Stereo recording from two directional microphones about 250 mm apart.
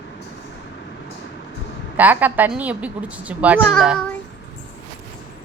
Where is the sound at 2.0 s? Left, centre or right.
Centre.